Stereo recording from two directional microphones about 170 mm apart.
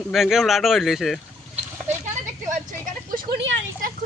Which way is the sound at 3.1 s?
80° right.